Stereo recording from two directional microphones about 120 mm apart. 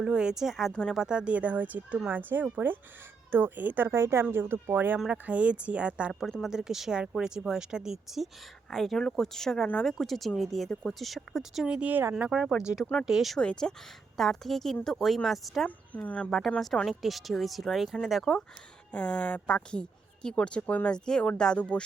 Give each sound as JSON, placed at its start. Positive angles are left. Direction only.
{"t": 0.0, "sound": "speech", "side_deg": -10}
{"t": 1.0, "sound": "speech", "side_deg": -10}
{"t": 12.8, "sound": "speech", "side_deg": 10}
{"t": 13.1, "sound": "speech", "side_deg": 0}
{"t": 15.6, "sound": "speech", "side_deg": 15}
{"t": 16.3, "sound": "speech", "side_deg": 0}